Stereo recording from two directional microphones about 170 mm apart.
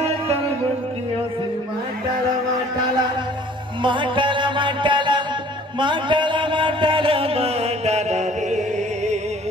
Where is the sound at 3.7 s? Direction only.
30° right (ahead or behind).